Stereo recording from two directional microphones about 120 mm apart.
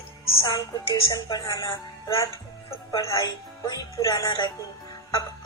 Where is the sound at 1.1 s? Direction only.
30° left (ahead or behind).